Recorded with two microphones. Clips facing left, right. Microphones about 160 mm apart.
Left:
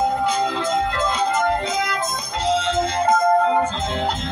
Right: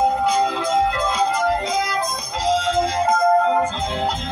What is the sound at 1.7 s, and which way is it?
Music, centre (ahead or behind).